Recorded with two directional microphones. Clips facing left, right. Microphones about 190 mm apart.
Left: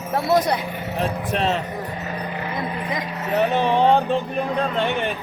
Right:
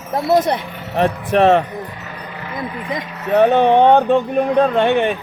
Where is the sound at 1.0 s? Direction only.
65° right (ahead or behind).